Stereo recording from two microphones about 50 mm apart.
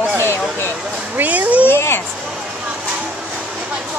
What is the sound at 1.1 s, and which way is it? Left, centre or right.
Speech, right.